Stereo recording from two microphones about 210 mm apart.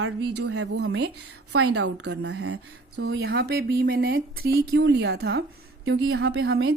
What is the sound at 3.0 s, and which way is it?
A woman's voice, 55° right (ahead or behind).